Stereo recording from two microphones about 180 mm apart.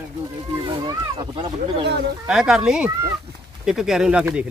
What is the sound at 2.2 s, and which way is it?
Speech, 5° right (ahead or behind).